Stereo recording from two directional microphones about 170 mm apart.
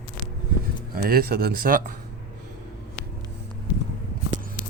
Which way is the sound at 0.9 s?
60° right (ahead or behind).